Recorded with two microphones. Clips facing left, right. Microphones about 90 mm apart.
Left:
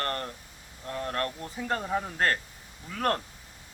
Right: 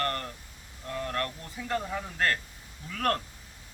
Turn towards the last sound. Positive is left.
turn(degrees=30)  # may be behind; listen again after turning